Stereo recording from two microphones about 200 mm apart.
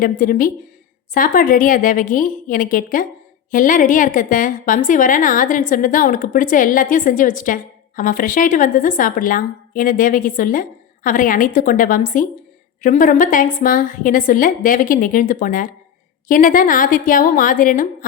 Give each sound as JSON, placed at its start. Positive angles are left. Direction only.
{"t": 0.0, "sound": "a woman's voice", "side_deg": 45}